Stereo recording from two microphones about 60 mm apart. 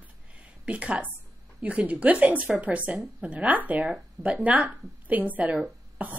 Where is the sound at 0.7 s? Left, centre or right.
Right.